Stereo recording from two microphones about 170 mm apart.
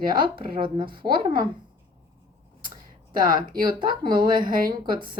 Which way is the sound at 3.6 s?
25° right (ahead or behind).